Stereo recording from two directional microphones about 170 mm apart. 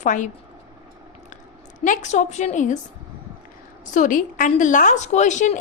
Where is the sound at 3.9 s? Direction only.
50° left (ahead or behind).